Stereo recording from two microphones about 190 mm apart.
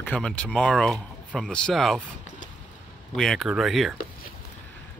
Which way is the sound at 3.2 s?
Centre (ahead or behind).